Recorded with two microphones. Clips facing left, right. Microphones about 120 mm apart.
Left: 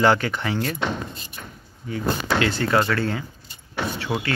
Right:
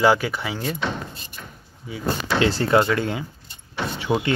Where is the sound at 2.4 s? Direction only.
30° right (ahead or behind).